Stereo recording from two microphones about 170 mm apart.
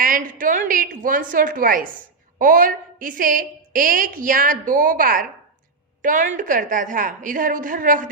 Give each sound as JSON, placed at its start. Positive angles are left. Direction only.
{"t": 0.0, "sound": "a woman's voice", "side_deg": -55}